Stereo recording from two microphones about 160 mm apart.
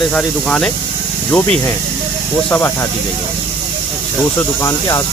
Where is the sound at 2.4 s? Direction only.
15° left (ahead or behind).